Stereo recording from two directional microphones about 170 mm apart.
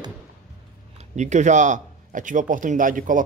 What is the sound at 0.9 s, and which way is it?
Speech, 45° right (ahead or behind).